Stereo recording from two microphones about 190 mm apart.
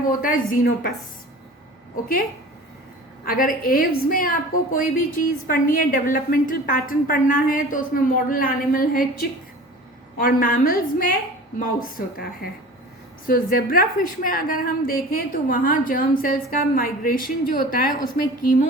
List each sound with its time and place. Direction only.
0.2 s a woman's voice: 45° left (ahead or behind)
3.2 s a woman's voice: 45° left (ahead or behind)
10.2 s a woman's voice: 45° left (ahead or behind)